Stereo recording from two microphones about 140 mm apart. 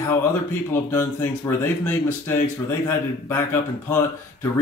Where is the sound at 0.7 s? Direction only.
15° left (ahead or behind).